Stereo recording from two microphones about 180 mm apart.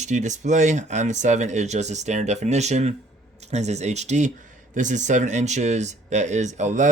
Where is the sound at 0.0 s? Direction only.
40° right (ahead or behind).